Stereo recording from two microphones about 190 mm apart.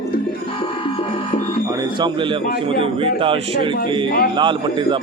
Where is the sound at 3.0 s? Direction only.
30° right (ahead or behind).